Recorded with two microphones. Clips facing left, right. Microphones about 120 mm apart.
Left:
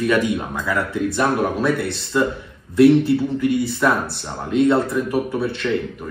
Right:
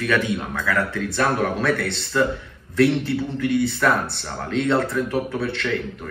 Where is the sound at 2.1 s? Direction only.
15° left (ahead or behind).